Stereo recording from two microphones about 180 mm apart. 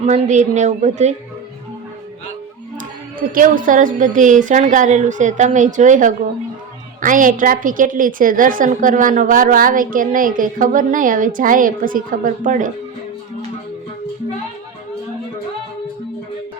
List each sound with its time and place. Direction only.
0.0 s a woman's voice: 40° right (ahead or behind)
3.2 s a woman's voice: 50° right (ahead or behind)